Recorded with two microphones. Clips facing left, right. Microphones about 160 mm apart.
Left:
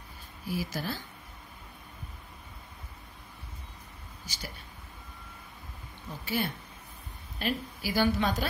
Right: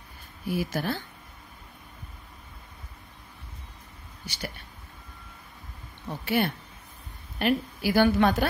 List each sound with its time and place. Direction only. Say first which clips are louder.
0.5 s a woman's voice: right 5 dB; 60° right (ahead or behind)
4.3 s speech: right 6 dB; 65° right (ahead or behind)
6.0 s a woman's voice: right 6 dB; 65° right (ahead or behind)